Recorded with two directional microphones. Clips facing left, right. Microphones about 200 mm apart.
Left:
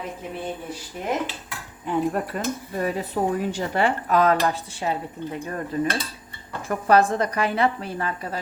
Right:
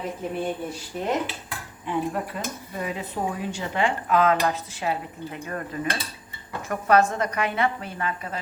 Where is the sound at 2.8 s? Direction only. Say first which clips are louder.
Left 5 dB; 40° left (ahead or behind).